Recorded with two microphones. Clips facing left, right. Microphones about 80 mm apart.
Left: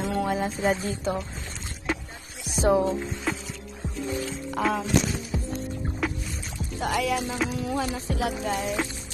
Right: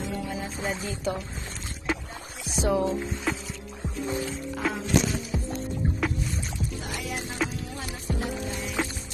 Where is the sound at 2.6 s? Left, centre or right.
Left.